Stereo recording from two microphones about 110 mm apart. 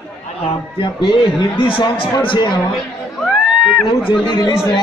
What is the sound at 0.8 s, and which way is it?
A man's voice, 45° left (ahead or behind).